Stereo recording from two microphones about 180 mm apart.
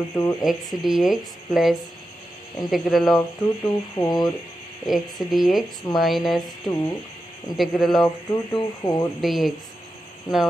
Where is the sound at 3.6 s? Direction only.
15° left (ahead or behind).